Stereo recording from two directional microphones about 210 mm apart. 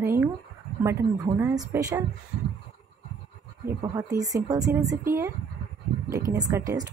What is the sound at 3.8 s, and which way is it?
A woman's voice, 15° right (ahead or behind).